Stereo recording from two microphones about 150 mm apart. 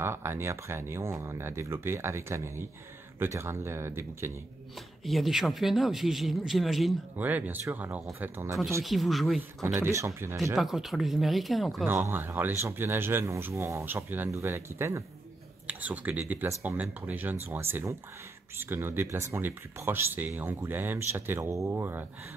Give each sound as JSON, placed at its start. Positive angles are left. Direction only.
{"t": 0.0, "sound": "speech", "side_deg": -15}
{"t": 5.0, "sound": "speech", "side_deg": 0}
{"t": 7.2, "sound": "speech", "side_deg": -10}
{"t": 8.8, "sound": "speech", "side_deg": 0}
{"t": 9.8, "sound": "speech", "side_deg": -20}
{"t": 10.3, "sound": "speech", "side_deg": 0}
{"t": 11.8, "sound": "speech", "side_deg": -15}